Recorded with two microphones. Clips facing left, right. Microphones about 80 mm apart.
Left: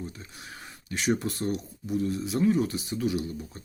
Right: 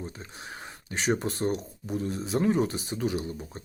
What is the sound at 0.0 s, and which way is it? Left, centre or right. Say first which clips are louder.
Speech: right 1 dB; right.